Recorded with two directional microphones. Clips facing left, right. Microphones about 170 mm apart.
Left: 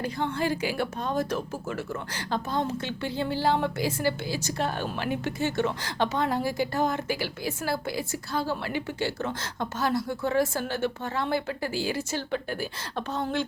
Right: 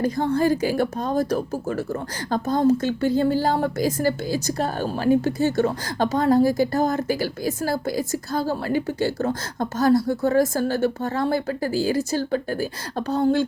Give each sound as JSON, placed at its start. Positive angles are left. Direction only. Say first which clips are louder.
{"t": 0.0, "sound": "speech", "louder": "right 8 dB", "side_deg": -40}